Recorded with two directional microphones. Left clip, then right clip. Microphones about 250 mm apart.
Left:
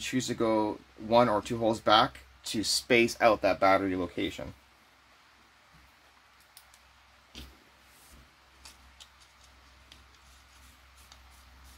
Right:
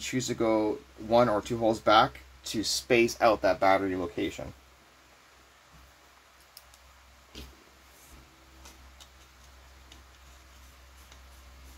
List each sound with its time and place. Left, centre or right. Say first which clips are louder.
0.0 s speech: right 1 dB; centre